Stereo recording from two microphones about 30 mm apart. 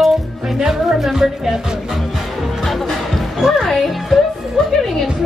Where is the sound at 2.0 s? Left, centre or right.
Centre.